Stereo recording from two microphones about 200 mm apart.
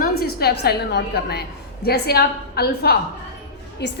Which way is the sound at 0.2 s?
50° left (ahead or behind).